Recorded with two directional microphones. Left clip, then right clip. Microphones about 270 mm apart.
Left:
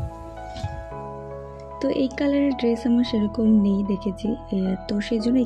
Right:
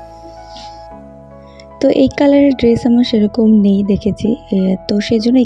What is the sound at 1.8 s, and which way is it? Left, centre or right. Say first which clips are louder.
Speech: right 12 dB; right.